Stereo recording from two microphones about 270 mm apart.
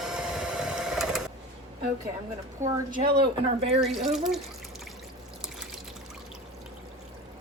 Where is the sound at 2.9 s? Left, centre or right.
Right.